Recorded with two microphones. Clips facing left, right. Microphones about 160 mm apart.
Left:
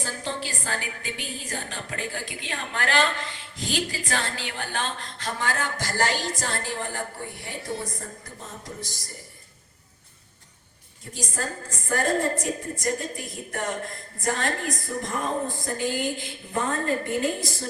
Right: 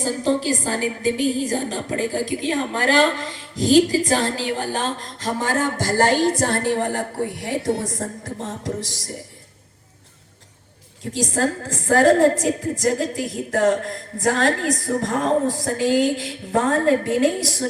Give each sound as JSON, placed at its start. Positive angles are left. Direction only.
{"t": 0.0, "sound": "a woman's voice", "side_deg": -40}
{"t": 11.1, "sound": "a woman's voice", "side_deg": -90}